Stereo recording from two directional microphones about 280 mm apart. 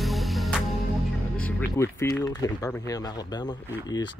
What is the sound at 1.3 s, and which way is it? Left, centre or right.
Speech, centre.